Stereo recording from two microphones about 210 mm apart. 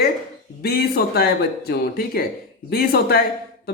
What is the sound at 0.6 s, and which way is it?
Speech, 50° left (ahead or behind).